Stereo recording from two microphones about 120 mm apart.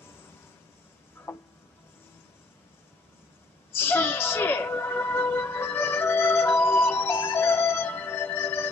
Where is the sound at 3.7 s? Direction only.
20° left (ahead or behind).